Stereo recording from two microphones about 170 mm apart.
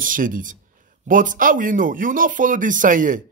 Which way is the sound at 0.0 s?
55° right (ahead or behind).